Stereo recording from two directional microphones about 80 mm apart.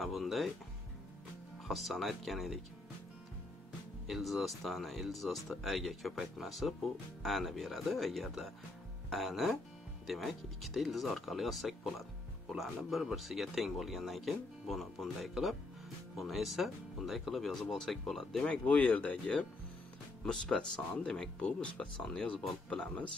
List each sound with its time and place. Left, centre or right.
0.0 s music: centre
1.7 s speech: centre
4.1 s speech: centre
18.5 s speech: centre